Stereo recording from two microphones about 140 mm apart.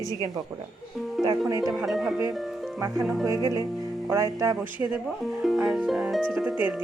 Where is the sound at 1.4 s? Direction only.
25° right (ahead or behind).